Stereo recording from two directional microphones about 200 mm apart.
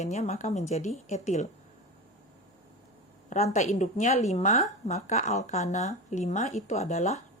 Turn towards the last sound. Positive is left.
turn(degrees=35)  # may be behind; listen again after turning